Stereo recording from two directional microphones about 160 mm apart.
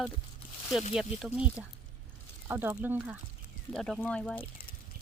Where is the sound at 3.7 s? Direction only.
5° left (ahead or behind).